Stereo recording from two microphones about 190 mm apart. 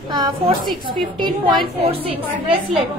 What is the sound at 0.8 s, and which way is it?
A woman's voice, 25° right (ahead or behind).